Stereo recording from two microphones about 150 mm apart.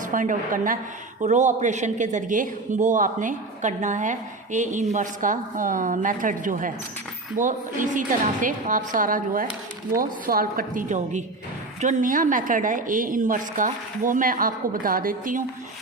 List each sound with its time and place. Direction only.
0.1 s a woman's voice: 60° right (ahead or behind)
1.2 s a woman's voice: 55° right (ahead or behind)